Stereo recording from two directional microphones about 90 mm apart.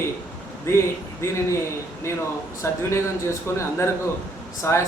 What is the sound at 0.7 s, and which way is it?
A man's voice, 30° left (ahead or behind).